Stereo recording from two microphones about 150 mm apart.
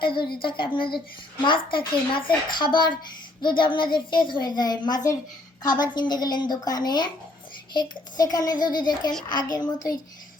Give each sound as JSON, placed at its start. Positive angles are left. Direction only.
{"t": 0.0, "sound": "a woman's voice", "side_deg": 35}